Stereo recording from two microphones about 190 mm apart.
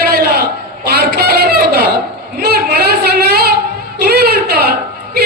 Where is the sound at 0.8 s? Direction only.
55° right (ahead or behind).